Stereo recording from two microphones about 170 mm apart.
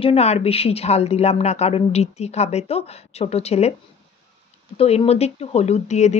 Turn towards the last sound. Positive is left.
turn(degrees=40)  # may be behind; listen again after turning